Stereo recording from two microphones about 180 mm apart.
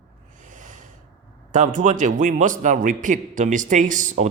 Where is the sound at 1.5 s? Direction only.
45° right (ahead or behind).